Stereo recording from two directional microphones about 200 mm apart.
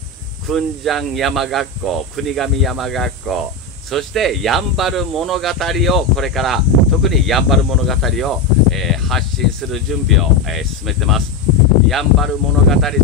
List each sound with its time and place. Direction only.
0.5 s speech: centre (ahead or behind)